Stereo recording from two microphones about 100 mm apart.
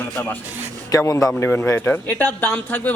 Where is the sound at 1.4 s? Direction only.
15° left (ahead or behind).